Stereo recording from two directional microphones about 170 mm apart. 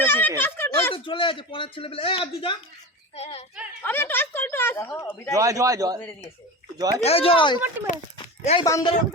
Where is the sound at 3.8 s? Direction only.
10° left (ahead or behind).